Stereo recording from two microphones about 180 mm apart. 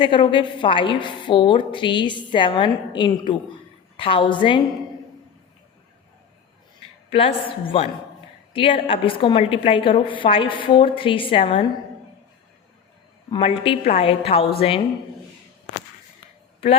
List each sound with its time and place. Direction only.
0.0 s a woman's voice: 25° left (ahead or behind)
7.1 s a woman's voice: 30° left (ahead or behind)
13.3 s a woman's voice: 30° left (ahead or behind)